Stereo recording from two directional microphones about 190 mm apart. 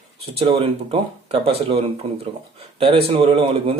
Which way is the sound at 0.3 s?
30° right (ahead or behind).